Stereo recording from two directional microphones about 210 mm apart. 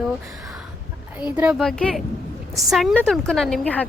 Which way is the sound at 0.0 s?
5° right (ahead or behind).